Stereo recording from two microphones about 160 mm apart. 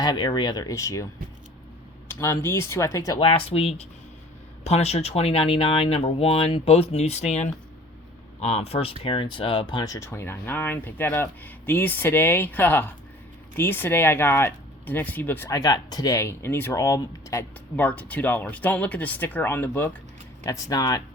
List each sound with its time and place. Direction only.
0.0 s speech: 25° left (ahead or behind)
15.4 s speech: 25° left (ahead or behind)